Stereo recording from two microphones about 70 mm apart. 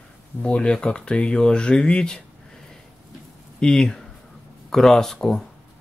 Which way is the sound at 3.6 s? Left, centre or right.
Centre.